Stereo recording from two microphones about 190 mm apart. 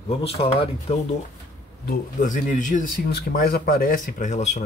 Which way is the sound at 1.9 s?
40° left (ahead or behind).